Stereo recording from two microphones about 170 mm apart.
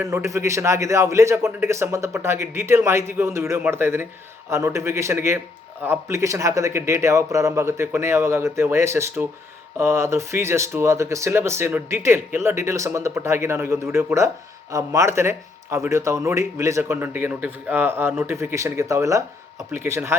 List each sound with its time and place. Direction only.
0.0 s speech: 15° right (ahead or behind)